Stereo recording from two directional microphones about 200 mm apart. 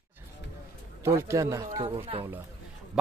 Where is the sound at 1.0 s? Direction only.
15° right (ahead or behind).